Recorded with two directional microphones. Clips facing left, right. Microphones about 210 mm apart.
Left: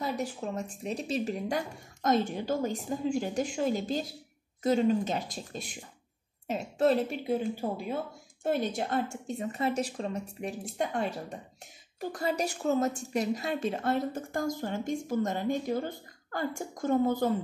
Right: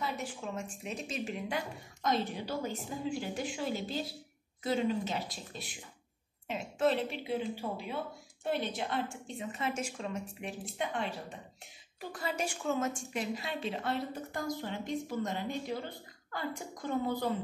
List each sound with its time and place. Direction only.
0.0 s a woman's voice: 40° left (ahead or behind)